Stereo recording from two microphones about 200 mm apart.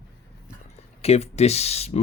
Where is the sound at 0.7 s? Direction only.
30° left (ahead or behind).